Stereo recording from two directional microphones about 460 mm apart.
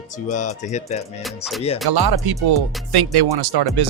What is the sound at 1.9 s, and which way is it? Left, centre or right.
Speech, right.